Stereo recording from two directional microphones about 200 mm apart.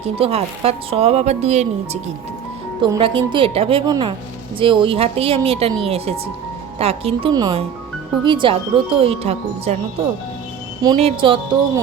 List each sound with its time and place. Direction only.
0.2 s speech: 30° right (ahead or behind)
6.7 s speech: 30° right (ahead or behind)
10.8 s speech: 25° right (ahead or behind)